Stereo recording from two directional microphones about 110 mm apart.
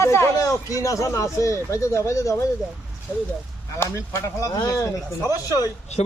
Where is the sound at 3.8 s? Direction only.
25° left (ahead or behind).